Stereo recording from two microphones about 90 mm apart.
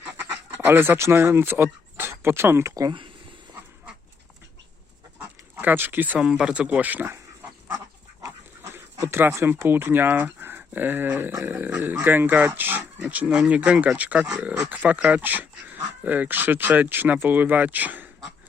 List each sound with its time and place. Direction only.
0.2 s a sound: 25° right (ahead or behind)
0.7 s speech: 25° right (ahead or behind)
5.5 s speech: 20° right (ahead or behind)
6.1 s speech: 10° right (ahead or behind)
8.2 s speech: 35° right (ahead or behind)